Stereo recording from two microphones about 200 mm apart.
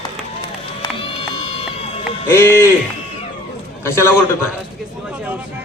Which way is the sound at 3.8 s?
15° left (ahead or behind).